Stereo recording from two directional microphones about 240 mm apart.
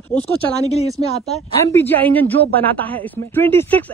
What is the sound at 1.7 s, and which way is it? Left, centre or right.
Speech, centre.